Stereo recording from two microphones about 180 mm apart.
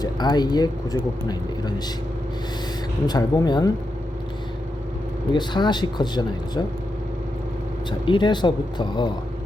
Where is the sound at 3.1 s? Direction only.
20° left (ahead or behind).